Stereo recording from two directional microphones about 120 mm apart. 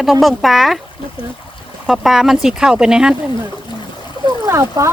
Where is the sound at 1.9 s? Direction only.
5° right (ahead or behind).